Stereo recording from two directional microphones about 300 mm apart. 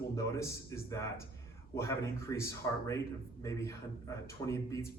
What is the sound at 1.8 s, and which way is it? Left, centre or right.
A man's voice, centre.